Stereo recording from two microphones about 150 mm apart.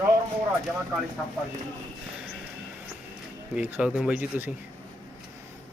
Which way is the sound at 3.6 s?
10° right (ahead or behind).